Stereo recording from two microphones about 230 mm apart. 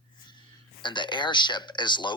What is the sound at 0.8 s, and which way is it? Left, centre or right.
Speech, centre.